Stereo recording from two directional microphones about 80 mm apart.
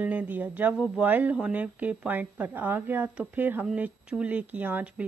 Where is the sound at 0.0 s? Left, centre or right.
Centre.